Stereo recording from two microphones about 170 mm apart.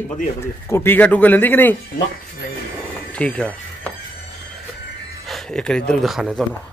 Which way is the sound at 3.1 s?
5° left (ahead or behind).